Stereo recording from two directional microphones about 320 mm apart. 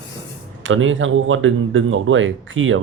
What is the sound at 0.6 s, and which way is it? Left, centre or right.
Speech, right.